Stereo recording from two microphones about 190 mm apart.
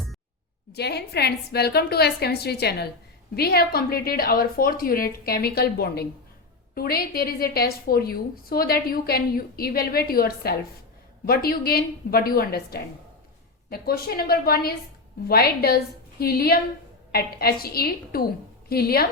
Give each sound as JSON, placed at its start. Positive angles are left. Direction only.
{"t": 0.7, "sound": "a woman's voice", "side_deg": 60}